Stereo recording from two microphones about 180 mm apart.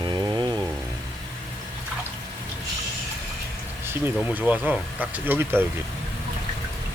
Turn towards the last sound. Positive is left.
turn(degrees=-10)  # may be behind; listen again after turning